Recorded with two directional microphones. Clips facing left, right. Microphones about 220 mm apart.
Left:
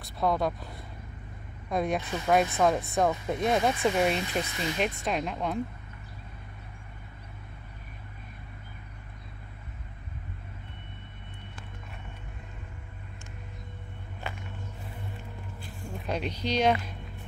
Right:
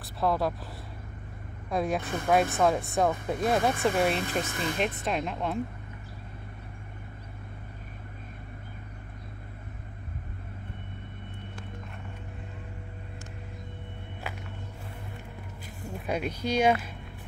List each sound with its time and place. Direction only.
0.0 s speech: 5° right (ahead or behind)
1.7 s speech: centre (ahead or behind)
2.0 s speech: 50° right (ahead or behind)
2.5 s speech: centre (ahead or behind)
3.9 s speech: 50° right (ahead or behind)
4.7 s speech: centre (ahead or behind)
16.1 s speech: 10° right (ahead or behind)